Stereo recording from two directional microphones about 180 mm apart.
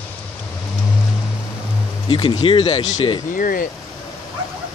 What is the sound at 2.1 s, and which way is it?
Speech, 25° left (ahead or behind).